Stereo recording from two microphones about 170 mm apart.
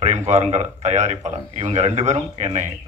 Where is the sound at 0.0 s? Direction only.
45° right (ahead or behind).